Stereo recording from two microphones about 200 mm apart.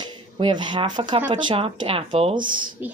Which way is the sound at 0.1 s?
25° right (ahead or behind).